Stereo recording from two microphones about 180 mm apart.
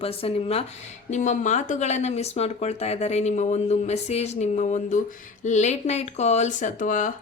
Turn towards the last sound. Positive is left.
turn(degrees=45)  # may be behind; listen again after turning